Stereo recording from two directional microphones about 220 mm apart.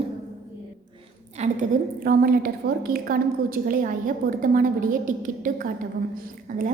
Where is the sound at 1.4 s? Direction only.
30° right (ahead or behind).